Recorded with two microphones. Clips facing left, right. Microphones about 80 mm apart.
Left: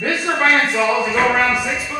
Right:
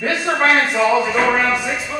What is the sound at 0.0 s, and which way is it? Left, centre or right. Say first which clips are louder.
A man's voice: right 1 dB; centre.